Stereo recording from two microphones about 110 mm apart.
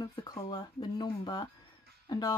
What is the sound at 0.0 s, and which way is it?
Speech, 40° left (ahead or behind).